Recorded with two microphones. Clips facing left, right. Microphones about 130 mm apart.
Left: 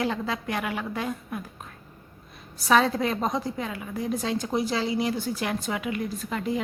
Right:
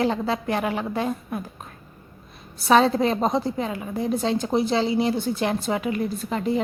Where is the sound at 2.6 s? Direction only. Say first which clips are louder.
Right 4 dB; 25° right (ahead or behind).